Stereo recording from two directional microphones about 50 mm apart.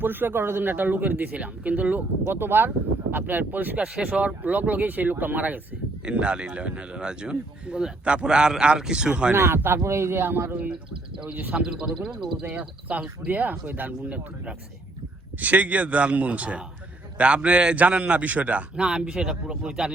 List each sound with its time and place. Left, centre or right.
0.0 s speech: right
2.2 s speech: right
4.0 s speech: right
6.1 s speech: right
9.3 s speech: right
9.8 s speech: right
10.2 s speech: right
11.5 s speech: centre
12.4 s speech: right
15.4 s speech: right
18.8 s speech: centre